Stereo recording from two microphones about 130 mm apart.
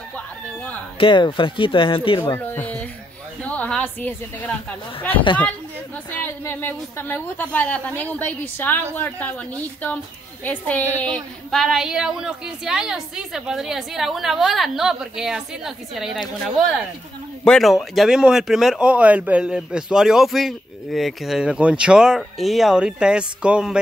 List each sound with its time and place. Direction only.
0.9 s speech: 40° left (ahead or behind)
2.2 s speech: 20° left (ahead or behind)
3.4 s a sound: 10° left (ahead or behind)
5.1 s speech: 40° left (ahead or behind)
6.1 s a woman's voice: 15° left (ahead or behind)
11.5 s speech: centre (ahead or behind)